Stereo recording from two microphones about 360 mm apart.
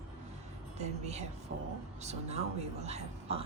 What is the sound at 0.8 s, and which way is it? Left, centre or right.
A woman's voice, centre.